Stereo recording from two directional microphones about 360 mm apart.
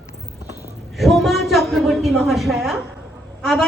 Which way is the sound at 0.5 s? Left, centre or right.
Centre.